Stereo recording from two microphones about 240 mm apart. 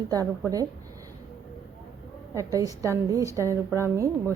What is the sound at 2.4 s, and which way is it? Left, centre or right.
A woman's voice, centre.